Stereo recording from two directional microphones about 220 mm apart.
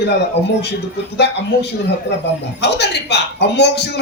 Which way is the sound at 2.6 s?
50° left (ahead or behind).